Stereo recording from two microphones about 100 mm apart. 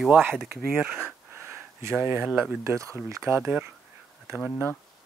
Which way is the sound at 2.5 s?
30° right (ahead or behind).